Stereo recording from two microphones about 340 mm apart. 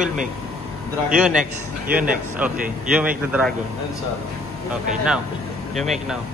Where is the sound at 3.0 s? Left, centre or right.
Centre.